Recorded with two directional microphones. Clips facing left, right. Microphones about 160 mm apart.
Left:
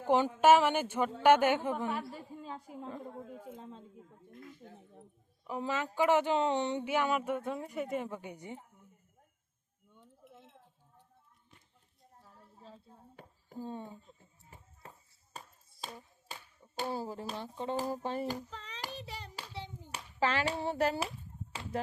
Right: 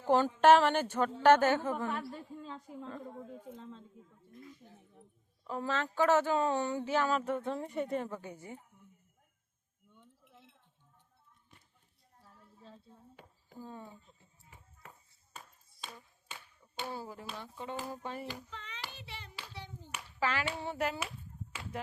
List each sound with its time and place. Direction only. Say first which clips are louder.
0.1 s speech: even; 10° left (ahead or behind)
4.1 s speech: left 2 dB; 60° left (ahead or behind)
5.5 s speech: even; 15° left (ahead or behind)
10.2 s sheep: left 5 dB; 45° left (ahead or behind)
13.6 s speech: left 5 dB; 25° left (ahead or behind)
14.5 s clapping: left 2 dB; 35° left (ahead or behind)
16.0 s speech: left 3 dB; 35° left (ahead or behind)
19.5 s clapping: left 2 dB; 25° left (ahead or behind)
20.1 s speech: left 3 dB; 30° left (ahead or behind)